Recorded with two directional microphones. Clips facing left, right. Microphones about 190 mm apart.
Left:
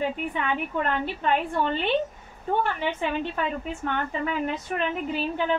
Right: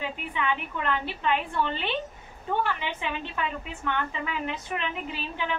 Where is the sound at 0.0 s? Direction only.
45° left (ahead or behind).